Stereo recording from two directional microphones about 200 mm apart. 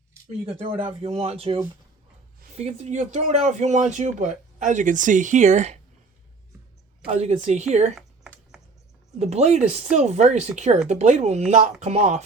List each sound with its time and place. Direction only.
0.9 s speech: 30° right (ahead or behind)
2.6 s speech: 30° right (ahead or behind)
7.1 s speech: 35° right (ahead or behind)
7.9 s typing: centre (ahead or behind)
9.1 s speech: 35° right (ahead or behind)